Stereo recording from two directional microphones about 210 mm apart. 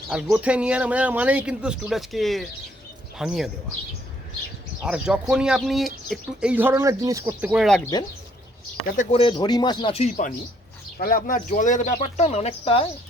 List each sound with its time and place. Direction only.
0.1 s speech: 5° right (ahead or behind)
4.8 s speech: 5° right (ahead or behind)
7.5 s speech: centre (ahead or behind)
9.0 s speech: 25° left (ahead or behind)